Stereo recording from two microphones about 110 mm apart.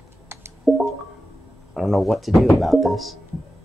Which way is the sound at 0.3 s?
25° right (ahead or behind).